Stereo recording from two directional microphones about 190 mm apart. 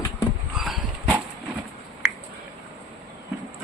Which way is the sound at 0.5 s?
Centre (ahead or behind).